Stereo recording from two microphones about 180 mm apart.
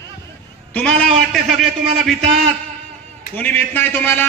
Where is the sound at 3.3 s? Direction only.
10° left (ahead or behind).